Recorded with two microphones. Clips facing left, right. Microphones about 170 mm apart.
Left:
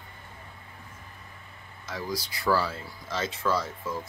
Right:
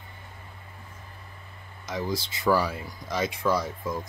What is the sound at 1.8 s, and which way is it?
Speech, 20° right (ahead or behind).